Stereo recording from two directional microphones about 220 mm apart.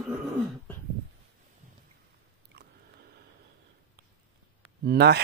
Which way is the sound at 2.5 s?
50° right (ahead or behind).